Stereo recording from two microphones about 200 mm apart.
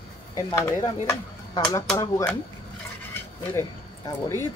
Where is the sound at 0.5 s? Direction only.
15° left (ahead or behind).